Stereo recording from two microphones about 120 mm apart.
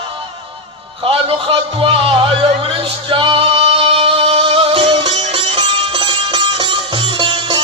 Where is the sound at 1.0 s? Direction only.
50° right (ahead or behind).